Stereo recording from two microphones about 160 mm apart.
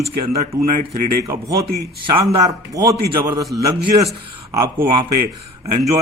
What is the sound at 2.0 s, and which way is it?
Speech, 30° right (ahead or behind).